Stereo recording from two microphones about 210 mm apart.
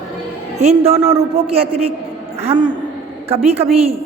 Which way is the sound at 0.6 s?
30° right (ahead or behind).